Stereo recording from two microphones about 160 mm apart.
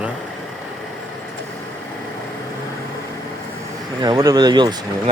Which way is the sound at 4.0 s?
25° right (ahead or behind).